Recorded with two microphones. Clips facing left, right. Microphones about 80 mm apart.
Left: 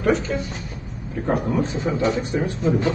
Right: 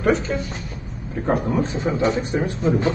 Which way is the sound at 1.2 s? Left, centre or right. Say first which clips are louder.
Right 1 dB; right.